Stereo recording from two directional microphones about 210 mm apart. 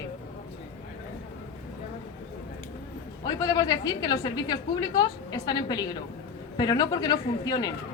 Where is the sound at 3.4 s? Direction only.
20° left (ahead or behind).